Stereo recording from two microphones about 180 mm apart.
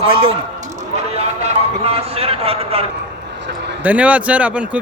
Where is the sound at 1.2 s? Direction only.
35° right (ahead or behind).